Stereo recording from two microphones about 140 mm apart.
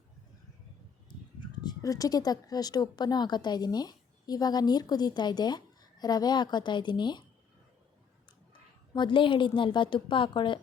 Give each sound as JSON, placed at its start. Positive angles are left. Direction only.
{"t": 1.4, "sound": "speech", "side_deg": 30}
{"t": 8.9, "sound": "a woman's voice", "side_deg": 35}